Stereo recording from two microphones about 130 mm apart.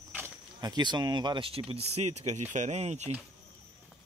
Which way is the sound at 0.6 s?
30° right (ahead or behind).